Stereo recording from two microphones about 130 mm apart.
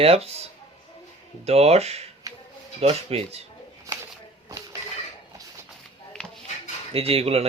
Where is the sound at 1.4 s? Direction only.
55° right (ahead or behind).